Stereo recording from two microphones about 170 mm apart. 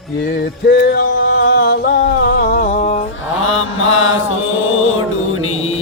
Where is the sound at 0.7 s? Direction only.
75° left (ahead or behind); by 3.0 s 45° left (ahead or behind).